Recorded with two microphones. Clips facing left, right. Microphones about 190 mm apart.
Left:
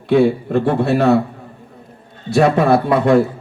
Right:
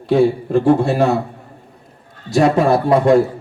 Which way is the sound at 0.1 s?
60° left (ahead or behind).